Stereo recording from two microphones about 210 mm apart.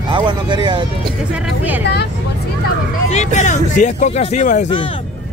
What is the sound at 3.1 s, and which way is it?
Speech, 35° left (ahead or behind).